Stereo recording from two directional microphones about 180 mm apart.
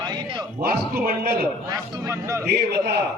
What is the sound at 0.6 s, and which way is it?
Speech, 55° right (ahead or behind).